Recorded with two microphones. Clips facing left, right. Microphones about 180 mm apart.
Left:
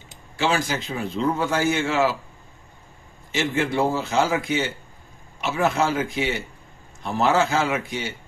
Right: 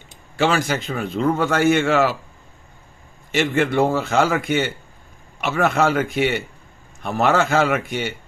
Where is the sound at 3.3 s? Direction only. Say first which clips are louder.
Right 4 dB; 65° right (ahead or behind).